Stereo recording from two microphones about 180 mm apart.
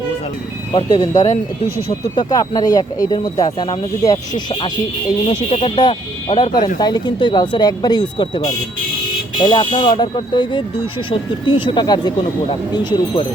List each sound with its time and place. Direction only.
0.7 s speech: 25° left (ahead or behind)
5.2 s speech: 30° left (ahead or behind)